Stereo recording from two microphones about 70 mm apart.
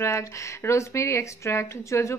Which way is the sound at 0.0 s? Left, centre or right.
Left.